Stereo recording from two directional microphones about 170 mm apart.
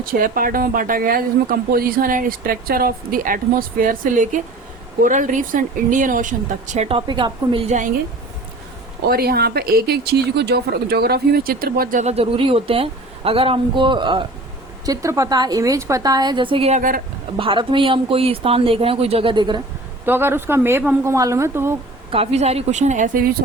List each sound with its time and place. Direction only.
0.0 s a woman's voice: 55° right (ahead or behind); by 7.6 s 25° right (ahead or behind)
9.0 s a woman's voice: 65° right (ahead or behind); by 19.6 s 25° right (ahead or behind)
20.1 s speech: 15° right (ahead or behind)
22.1 s speech: 35° right (ahead or behind); by 23.4 s 55° right (ahead or behind)